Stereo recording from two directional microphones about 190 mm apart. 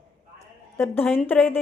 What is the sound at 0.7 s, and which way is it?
Speech, 10° left (ahead or behind).